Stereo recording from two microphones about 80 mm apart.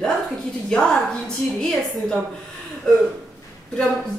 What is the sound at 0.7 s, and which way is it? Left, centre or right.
A woman's voice, centre.